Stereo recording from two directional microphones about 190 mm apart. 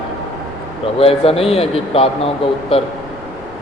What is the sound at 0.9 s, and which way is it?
Speech, 30° left (ahead or behind).